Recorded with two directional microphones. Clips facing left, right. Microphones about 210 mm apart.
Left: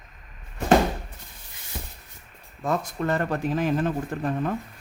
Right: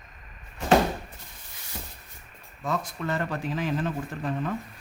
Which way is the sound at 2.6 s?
50° left (ahead or behind).